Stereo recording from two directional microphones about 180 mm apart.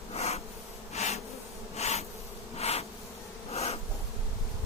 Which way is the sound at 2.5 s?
35° left (ahead or behind).